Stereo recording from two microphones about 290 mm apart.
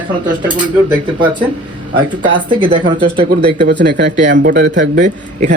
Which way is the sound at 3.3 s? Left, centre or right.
Right.